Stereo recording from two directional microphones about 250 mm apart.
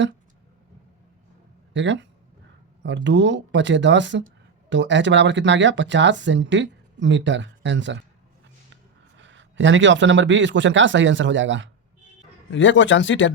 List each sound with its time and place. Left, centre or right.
1.7 s speech: right
12.5 s speech: left